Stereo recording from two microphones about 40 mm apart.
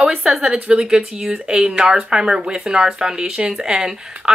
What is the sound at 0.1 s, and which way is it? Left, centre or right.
A woman's voice, centre.